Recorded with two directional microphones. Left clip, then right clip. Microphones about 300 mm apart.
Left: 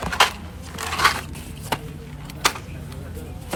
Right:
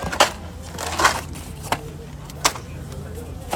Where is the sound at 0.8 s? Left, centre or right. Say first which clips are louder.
Right 1 dB; right.